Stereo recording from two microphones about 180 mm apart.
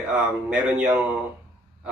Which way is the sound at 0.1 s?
5° right (ahead or behind).